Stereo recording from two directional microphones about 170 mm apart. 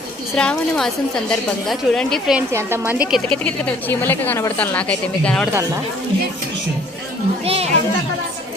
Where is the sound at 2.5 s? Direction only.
15° right (ahead or behind).